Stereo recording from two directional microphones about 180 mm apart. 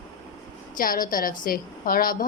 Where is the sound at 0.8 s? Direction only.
50° left (ahead or behind).